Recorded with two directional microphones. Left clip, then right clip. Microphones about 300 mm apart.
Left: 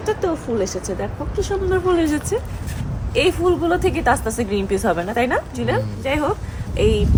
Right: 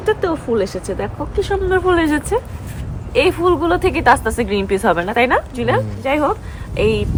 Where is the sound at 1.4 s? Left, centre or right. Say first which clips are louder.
Right 4 dB; centre.